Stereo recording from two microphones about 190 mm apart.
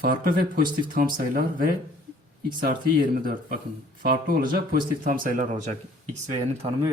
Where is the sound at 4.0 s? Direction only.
50° right (ahead or behind).